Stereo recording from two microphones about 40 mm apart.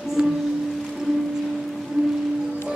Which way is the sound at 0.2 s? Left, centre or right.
Right.